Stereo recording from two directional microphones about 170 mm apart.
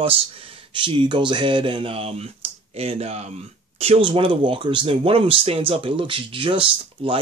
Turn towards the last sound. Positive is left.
turn(degrees=-30)  # may be behind; listen again after turning